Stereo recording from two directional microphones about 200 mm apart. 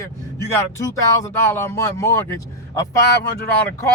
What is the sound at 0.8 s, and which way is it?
Speech, 15° left (ahead or behind).